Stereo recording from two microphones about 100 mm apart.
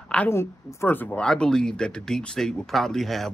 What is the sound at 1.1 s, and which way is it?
Speech, 10° left (ahead or behind).